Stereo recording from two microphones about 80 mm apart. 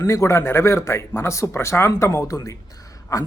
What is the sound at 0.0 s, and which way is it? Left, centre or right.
A man's voice, left.